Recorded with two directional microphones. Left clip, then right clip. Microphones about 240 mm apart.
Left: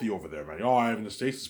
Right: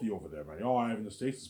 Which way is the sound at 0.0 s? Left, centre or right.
Left.